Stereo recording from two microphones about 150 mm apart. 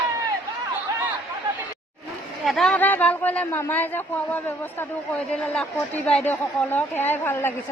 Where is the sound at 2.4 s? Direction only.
Centre (ahead or behind).